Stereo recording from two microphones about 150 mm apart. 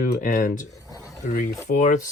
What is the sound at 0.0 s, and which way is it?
Speech, 70° left (ahead or behind).